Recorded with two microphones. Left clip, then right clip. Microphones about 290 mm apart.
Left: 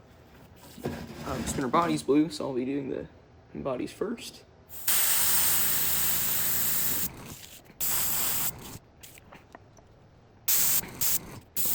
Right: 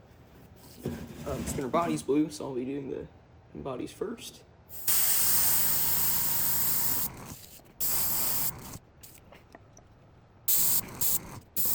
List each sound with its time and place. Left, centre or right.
0.6 s a sound: centre
1.6 s speech: left
4.2 s spray: centre
10.4 s static: centre